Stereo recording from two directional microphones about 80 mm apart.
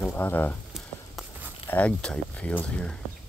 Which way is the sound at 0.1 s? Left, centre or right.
Left.